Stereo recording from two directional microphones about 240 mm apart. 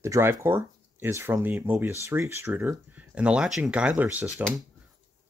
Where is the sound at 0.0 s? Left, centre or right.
Centre.